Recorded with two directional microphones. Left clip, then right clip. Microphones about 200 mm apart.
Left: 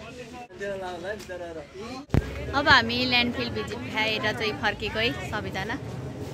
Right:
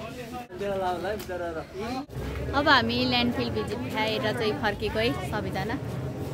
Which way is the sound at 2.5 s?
Centre (ahead or behind).